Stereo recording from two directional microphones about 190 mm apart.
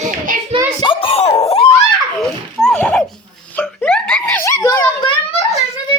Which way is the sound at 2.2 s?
Centre (ahead or behind).